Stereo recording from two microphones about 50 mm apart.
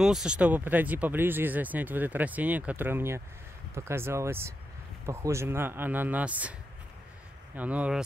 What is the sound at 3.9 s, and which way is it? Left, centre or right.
A man's voice, right.